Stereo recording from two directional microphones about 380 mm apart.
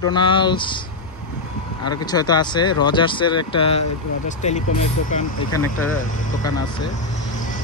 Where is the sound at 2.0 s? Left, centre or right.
Centre.